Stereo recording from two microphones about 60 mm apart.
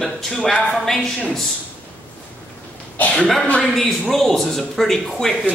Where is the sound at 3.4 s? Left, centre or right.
Centre.